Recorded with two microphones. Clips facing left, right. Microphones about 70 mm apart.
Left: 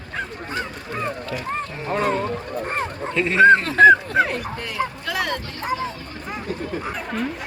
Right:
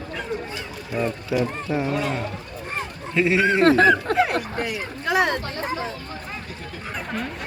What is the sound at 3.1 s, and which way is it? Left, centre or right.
Speech, centre.